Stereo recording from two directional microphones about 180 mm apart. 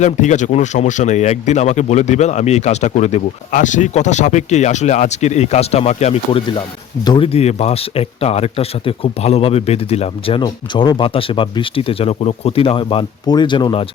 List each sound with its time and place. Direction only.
0.0 s speech: 40° left (ahead or behind)
7.0 s speech: 25° left (ahead or behind)